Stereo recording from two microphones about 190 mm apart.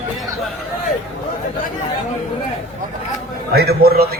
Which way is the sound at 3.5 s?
55° right (ahead or behind).